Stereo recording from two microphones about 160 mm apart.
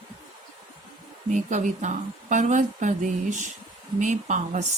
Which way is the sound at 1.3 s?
50° right (ahead or behind).